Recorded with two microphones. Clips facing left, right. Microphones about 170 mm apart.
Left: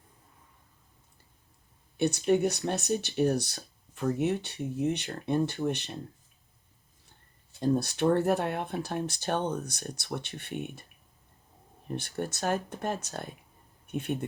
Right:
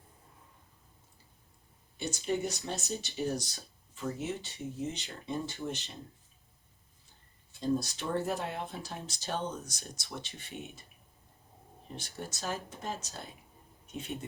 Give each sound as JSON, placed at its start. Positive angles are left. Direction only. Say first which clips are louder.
{"t": 2.0, "sound": "speech", "louder": "left 8 dB", "side_deg": 65}
{"t": 7.6, "sound": "speech", "louder": "left 6 dB", "side_deg": 60}
{"t": 11.9, "sound": "speech", "louder": "left 9 dB", "side_deg": 60}